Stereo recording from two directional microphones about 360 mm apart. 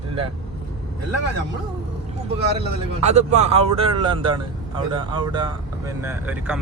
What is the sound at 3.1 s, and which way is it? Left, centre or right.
Speech, centre.